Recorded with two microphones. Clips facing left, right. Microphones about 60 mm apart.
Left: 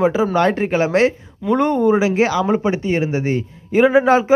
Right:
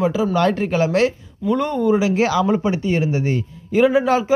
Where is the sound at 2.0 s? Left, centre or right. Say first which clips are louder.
Left 1 dB; centre.